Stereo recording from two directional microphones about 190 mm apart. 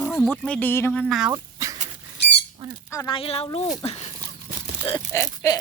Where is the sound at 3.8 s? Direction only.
35° left (ahead or behind).